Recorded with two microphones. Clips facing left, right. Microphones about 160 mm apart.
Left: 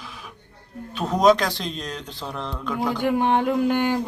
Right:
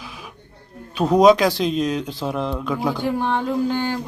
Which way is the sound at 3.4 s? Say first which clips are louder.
Left 1 dB; 15° left (ahead or behind).